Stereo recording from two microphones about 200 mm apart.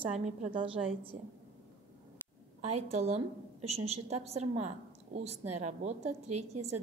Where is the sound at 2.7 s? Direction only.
30° right (ahead or behind).